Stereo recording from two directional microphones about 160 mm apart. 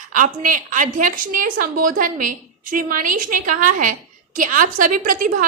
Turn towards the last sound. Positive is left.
turn(degrees=-60)  # may be behind; listen again after turning